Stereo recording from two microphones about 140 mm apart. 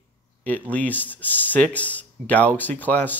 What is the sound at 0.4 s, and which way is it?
Speech, 10° left (ahead or behind).